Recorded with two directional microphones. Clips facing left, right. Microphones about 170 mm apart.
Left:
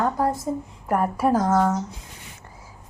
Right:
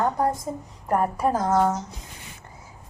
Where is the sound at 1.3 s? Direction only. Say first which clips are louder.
Left 1 dB; 10° right (ahead or behind).